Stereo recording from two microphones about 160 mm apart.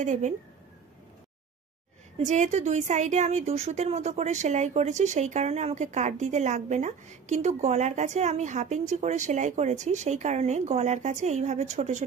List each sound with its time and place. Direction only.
0.0 s a woman's voice: 50° right (ahead or behind)
2.1 s a woman's voice: 50° right (ahead or behind)